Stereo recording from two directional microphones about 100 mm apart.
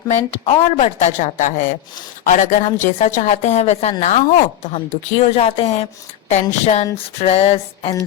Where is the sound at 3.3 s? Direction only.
90° left.